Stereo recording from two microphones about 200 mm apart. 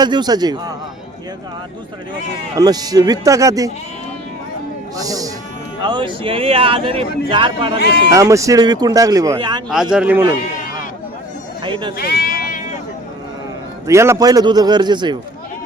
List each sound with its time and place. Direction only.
0.0 s a man's voice: 20° right (ahead or behind)
2.6 s speech: 20° right (ahead or behind)
4.9 s a man's voice: 15° right (ahead or behind)
9.9 s speech: 5° right (ahead or behind)
11.6 s a man's voice: 25° right (ahead or behind)
11.9 s sheep: 50° left (ahead or behind)
13.8 s a man's voice: 15° right (ahead or behind)